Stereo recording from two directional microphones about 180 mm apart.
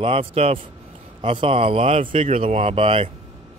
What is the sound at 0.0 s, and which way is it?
Speech, 30° right (ahead or behind).